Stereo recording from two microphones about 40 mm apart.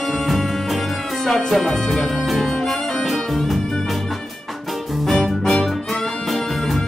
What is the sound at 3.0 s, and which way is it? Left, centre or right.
Music, centre.